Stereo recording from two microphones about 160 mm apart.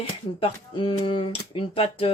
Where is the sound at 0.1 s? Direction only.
35° left (ahead or behind).